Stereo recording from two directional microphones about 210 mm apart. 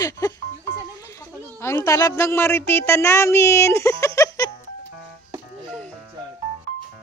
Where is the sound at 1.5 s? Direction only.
10° left (ahead or behind).